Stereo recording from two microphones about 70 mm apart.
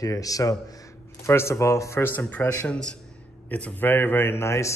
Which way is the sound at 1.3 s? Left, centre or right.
Left.